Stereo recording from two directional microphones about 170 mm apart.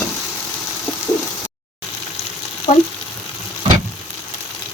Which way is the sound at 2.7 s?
35° left (ahead or behind).